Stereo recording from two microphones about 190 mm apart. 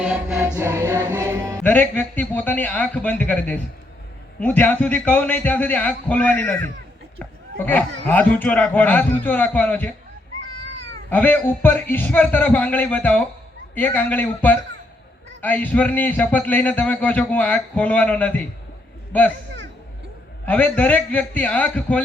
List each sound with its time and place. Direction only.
0.0 s music: 5° right (ahead or behind)
1.6 s a man's voice: 5° left (ahead or behind)
10.6 s cat: 70° right (ahead or behind)
11.1 s a man's voice: 10° left (ahead or behind)
20.4 s a man's voice: 10° left (ahead or behind)